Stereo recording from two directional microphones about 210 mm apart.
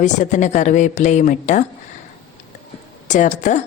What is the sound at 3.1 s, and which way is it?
Speech, 35° left (ahead or behind).